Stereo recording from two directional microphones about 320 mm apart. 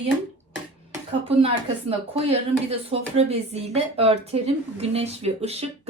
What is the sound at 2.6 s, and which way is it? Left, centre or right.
Speech, centre.